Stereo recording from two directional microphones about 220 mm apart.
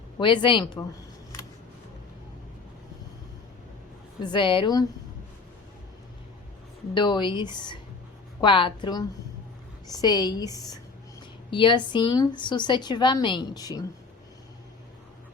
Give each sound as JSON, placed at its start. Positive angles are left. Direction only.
{"t": 0.2, "sound": "a woman's voice", "side_deg": 20}
{"t": 4.2, "sound": "a woman's voice", "side_deg": 20}
{"t": 6.9, "sound": "a woman's voice", "side_deg": 20}